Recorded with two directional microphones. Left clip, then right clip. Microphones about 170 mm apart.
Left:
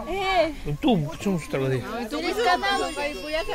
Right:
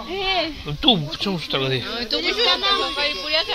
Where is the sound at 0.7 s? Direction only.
10° left (ahead or behind).